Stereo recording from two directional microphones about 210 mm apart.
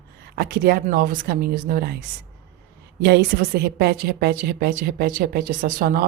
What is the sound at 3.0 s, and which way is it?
A woman's voice, 50° right (ahead or behind).